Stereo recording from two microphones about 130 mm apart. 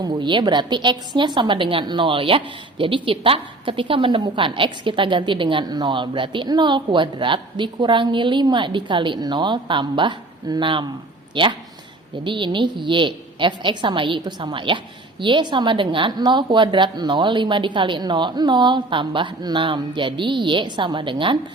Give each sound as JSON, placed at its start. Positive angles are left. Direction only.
{"t": 0.0, "sound": "a woman's voice", "side_deg": -35}